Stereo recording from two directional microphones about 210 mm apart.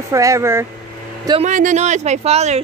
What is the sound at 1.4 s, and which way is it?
Speech, 35° right (ahead or behind).